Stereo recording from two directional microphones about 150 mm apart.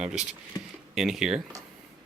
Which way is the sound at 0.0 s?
5° right (ahead or behind).